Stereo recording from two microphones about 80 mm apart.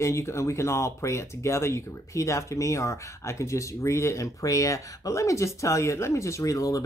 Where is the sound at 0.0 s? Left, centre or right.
Left.